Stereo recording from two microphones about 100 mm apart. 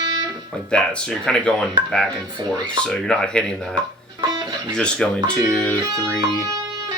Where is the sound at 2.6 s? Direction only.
10° left (ahead or behind).